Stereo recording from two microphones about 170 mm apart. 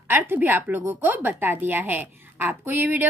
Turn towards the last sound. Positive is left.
turn(degrees=-10)  # may be behind; listen again after turning